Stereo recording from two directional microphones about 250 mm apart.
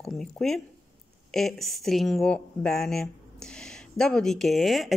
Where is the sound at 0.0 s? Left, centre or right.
Centre.